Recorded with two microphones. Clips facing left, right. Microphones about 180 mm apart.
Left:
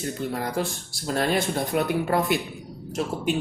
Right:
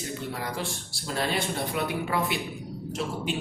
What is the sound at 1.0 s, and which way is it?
Speech, 50° left (ahead or behind).